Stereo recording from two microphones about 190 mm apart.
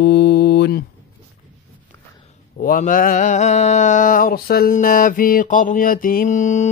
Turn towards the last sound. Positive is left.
turn(degrees=40)  # may be behind; listen again after turning